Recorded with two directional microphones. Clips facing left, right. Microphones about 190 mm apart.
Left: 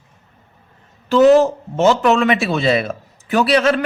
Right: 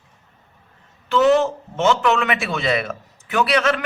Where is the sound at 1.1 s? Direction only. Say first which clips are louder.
Left 5 dB; 35° left (ahead or behind).